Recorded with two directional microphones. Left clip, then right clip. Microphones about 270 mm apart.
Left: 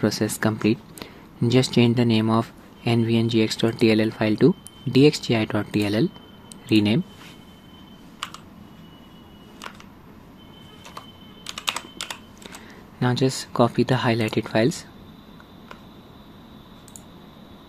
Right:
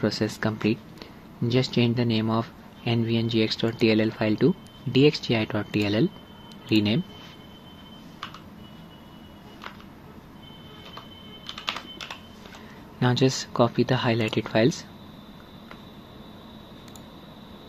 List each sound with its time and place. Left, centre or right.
0.0 s speech: centre
11.0 s typing: left
13.0 s speech: centre